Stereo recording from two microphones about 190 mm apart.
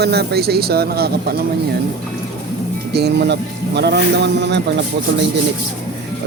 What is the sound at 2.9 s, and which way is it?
Speech, 60° right (ahead or behind).